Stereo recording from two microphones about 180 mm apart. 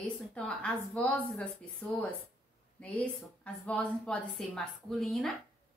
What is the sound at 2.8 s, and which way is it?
A woman's voice, 5° left (ahead or behind).